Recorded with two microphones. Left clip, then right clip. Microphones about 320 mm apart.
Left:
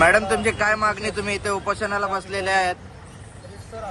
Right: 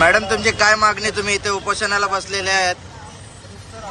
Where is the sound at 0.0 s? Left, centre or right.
Centre.